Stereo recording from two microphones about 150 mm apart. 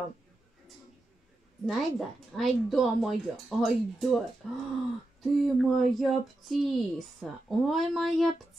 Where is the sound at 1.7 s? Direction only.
Centre (ahead or behind).